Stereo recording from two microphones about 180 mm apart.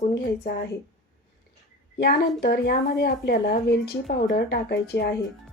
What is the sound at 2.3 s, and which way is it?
Speech, 60° left (ahead or behind).